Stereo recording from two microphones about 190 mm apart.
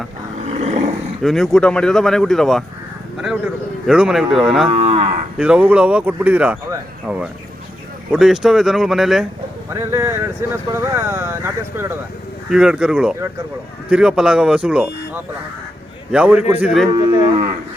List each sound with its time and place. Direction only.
0.3 s roar: 35° right (ahead or behind)
1.2 s speech: centre (ahead or behind)
4.7 s moo: 30° right (ahead or behind)
5.4 s speech: 5° right (ahead or behind)
9.7 s speech: 15° right (ahead or behind)